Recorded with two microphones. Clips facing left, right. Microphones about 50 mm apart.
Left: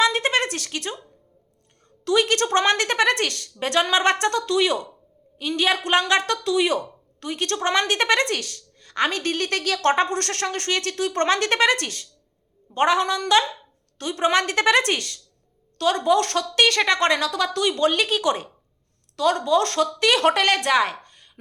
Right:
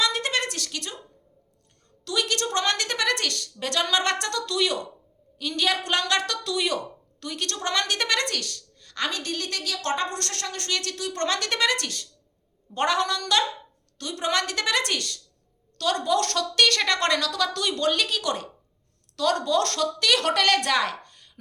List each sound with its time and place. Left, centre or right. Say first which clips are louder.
0.0 s a sound: left 5 dB; left
2.0 s a woman's voice: left 7 dB; left
12.7 s a woman's voice: left 4 dB; centre
20.5 s a woman's voice: left 3 dB; centre